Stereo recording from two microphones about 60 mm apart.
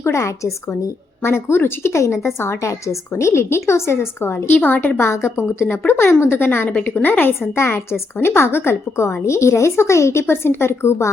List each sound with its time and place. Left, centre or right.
0.0 s a woman's voice: left
4.9 s a woman's voice: left
6.7 s a woman's voice: left